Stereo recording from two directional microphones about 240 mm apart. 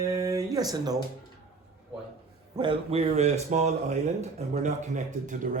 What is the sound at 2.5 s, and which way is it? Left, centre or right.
A man's voice, right.